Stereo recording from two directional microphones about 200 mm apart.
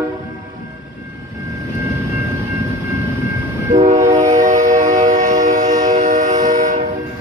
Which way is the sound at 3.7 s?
35° right (ahead or behind).